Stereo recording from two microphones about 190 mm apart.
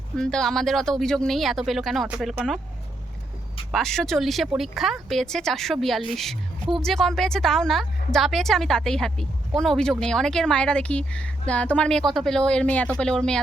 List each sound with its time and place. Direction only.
0.2 s a woman's voice: 5° left (ahead or behind)
3.7 s a woman's voice: centre (ahead or behind)